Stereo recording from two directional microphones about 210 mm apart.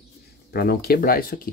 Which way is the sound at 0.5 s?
50° left (ahead or behind).